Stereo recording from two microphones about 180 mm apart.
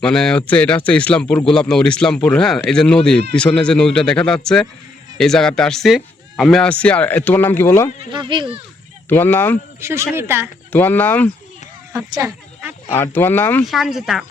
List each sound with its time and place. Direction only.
0.0 s speech: 5° left (ahead or behind)
8.1 s speech: 25° right (ahead or behind)
9.0 s speech: 10° left (ahead or behind)
9.8 s speech: 15° right (ahead or behind)
10.7 s speech: 10° left (ahead or behind)
11.9 s snake: 15° right (ahead or behind)
12.9 s speech: 10° left (ahead or behind)
13.7 s speech: centre (ahead or behind)